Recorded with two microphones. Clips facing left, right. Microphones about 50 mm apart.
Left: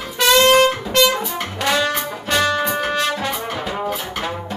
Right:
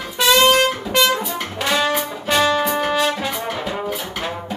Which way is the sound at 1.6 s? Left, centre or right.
Centre.